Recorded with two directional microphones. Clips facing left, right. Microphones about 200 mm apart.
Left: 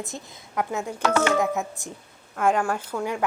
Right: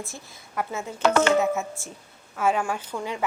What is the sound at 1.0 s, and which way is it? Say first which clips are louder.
Speech: right 3 dB; 65° right (ahead or behind).